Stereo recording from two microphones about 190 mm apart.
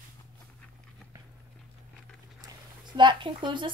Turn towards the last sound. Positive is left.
turn(degrees=-25)  # may be behind; listen again after turning